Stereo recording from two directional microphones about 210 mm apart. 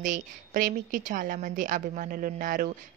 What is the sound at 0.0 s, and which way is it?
A woman's voice, 40° right (ahead or behind).